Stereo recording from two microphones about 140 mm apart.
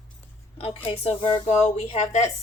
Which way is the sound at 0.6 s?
40° left (ahead or behind).